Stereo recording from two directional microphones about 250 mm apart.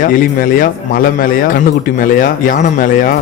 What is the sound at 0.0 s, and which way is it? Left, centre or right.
A man's voice, left.